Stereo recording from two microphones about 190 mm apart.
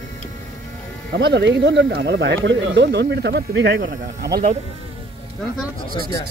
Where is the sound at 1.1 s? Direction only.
65° right (ahead or behind).